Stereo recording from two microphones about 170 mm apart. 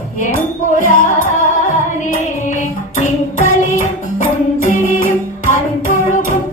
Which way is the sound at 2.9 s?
45° left (ahead or behind).